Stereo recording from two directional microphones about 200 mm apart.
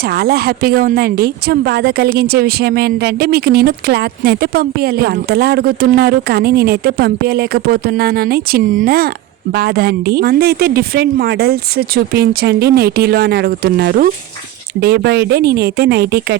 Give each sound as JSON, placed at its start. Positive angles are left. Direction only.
{"t": 0.0, "sound": "a woman's voice", "side_deg": -50}